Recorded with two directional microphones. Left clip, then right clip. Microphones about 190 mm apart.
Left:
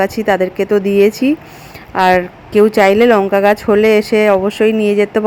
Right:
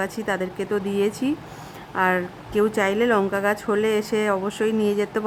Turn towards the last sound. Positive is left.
turn(degrees=15)  # may be behind; listen again after turning